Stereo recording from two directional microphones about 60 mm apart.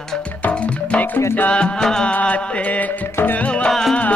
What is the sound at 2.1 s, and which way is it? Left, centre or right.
Music, left.